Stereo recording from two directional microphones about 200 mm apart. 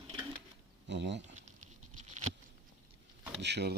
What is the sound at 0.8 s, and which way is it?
Speech, 60° right (ahead or behind).